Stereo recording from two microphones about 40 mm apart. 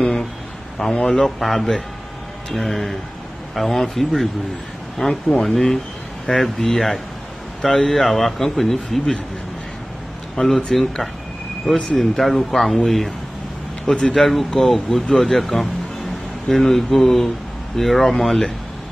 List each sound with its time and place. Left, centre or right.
1.0 s speech: centre
5.0 s speech: left
5.4 s speech: centre
10.3 s speech: centre
14.1 s speech: centre